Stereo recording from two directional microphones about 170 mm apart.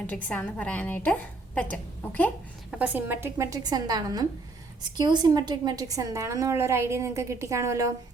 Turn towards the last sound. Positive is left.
turn(degrees=-15)  # may be behind; listen again after turning